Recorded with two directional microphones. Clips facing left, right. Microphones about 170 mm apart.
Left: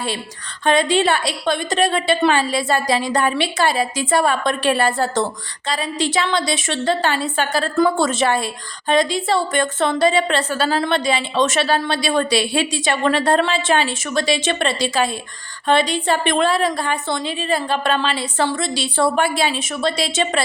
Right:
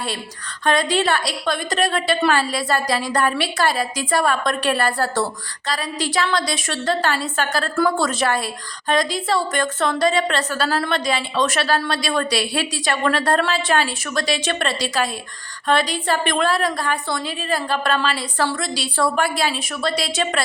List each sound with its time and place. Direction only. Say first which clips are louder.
0.6 s a woman's voice: left 3 dB; 25° left (ahead or behind)